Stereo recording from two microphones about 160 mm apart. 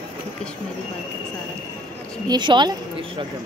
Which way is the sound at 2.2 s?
30° right (ahead or behind).